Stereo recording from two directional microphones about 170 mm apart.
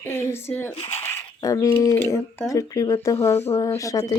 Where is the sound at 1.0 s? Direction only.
15° left (ahead or behind).